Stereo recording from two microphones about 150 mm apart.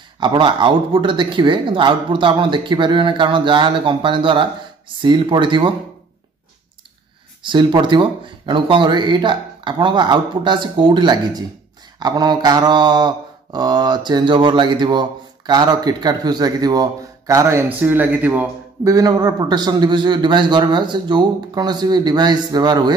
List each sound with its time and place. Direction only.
0.2 s speech: 30° right (ahead or behind)
7.4 s speech: 30° right (ahead or behind)
12.0 s mantra: 30° right (ahead or behind); by 18.5 s 10° right (ahead or behind)
18.9 s mantra: 25° right (ahead or behind)